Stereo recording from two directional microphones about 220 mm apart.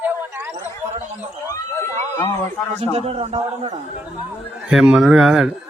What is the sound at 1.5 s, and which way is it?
Speech, 10° left (ahead or behind).